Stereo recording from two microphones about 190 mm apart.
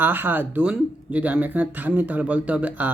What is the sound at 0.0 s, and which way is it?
Speech, 10° right (ahead or behind).